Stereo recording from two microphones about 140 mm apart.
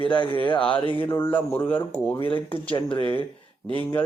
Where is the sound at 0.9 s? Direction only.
15° left (ahead or behind).